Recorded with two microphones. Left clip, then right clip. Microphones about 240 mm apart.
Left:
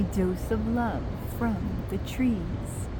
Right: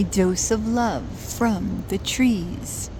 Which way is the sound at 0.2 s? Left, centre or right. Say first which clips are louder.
Right 8 dB; right.